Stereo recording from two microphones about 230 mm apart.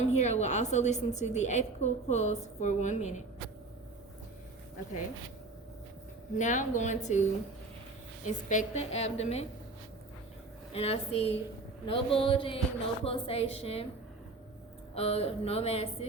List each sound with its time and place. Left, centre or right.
0.0 s a woman's voice: left
6.3 s a woman's voice: left
10.8 s a woman's voice: left
14.9 s a woman's voice: left